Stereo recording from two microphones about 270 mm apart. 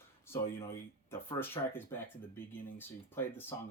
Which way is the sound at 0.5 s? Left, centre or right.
Centre.